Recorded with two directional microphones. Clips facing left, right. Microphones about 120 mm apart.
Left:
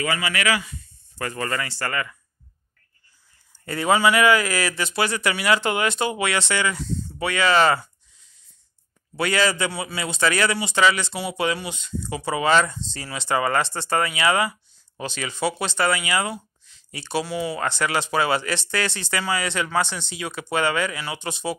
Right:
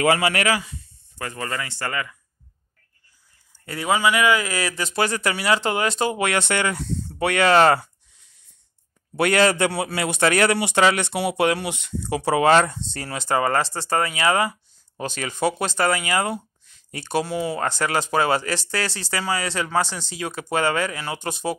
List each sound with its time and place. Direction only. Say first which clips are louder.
0.0 s a man's voice: right 7 dB; 65° right (ahead or behind)
0.4 s speech: right 1 dB; 40° right (ahead or behind)
1.4 s speech: left 1 dB; 10° right (ahead or behind)
3.6 s speech: left 2 dB; 5° right (ahead or behind); by 7.9 s 60° right (ahead or behind)
9.1 s a man's voice: right 4 dB; 60° right (ahead or behind)